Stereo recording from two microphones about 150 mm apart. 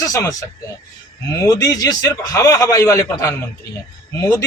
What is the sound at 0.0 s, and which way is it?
Speech, 20° left (ahead or behind).